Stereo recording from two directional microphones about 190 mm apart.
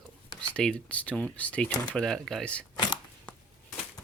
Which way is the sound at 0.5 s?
5° left (ahead or behind).